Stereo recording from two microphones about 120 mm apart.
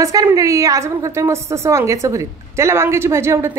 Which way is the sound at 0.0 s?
30° right (ahead or behind).